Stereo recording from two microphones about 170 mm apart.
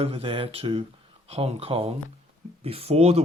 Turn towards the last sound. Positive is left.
turn(degrees=-35)  # may be behind; listen again after turning